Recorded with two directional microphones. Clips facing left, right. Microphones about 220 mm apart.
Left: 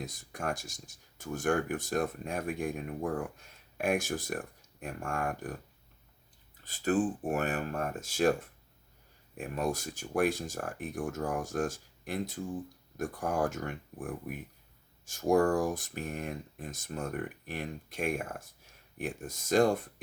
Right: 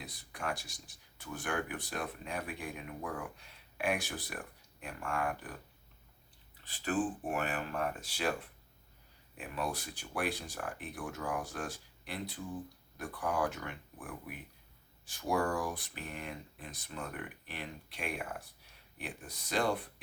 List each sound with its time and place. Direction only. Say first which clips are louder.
0.0 s speech: left 4 dB; 45° left (ahead or behind)
6.7 s speech: left 5 dB; 40° left (ahead or behind)